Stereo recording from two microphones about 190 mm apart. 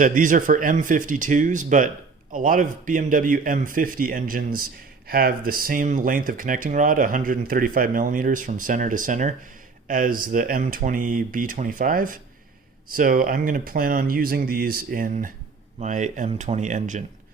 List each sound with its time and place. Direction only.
0.0 s speech: 45° right (ahead or behind)